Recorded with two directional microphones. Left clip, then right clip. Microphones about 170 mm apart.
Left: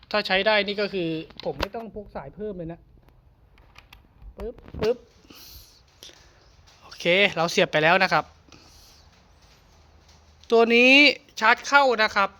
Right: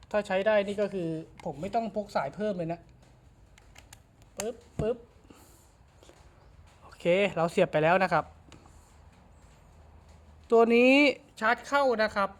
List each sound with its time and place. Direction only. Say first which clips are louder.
0.1 s speech: left 4 dB; 20° left (ahead or behind)
6.8 s speech: left 6 dB; centre (ahead or behind)
10.4 s speech: left 4 dB; centre (ahead or behind)
11.3 s speech: left 9 dB; 20° left (ahead or behind)